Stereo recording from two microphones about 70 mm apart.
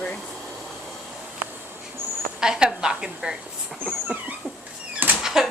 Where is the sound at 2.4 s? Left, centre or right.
Centre.